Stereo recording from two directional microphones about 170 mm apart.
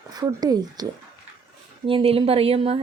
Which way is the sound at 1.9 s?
35° right (ahead or behind).